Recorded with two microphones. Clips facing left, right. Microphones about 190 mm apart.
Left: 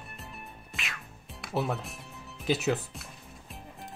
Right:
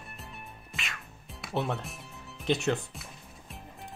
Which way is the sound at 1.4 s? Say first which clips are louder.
Left 1 dB; centre (ahead or behind).